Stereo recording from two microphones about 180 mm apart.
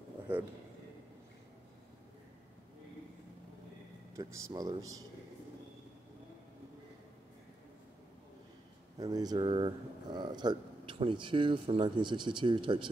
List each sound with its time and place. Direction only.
0.3 s speech: 10° right (ahead or behind)
4.2 s speech: 15° right (ahead or behind)
9.0 s speech: 20° right (ahead or behind)